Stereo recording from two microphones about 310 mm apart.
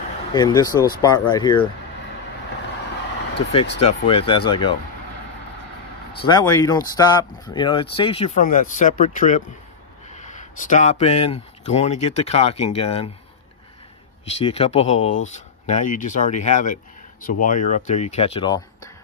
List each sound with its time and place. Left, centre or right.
0.3 s speech: centre
3.8 s speech: centre
6.2 s speech: centre
14.4 s speech: centre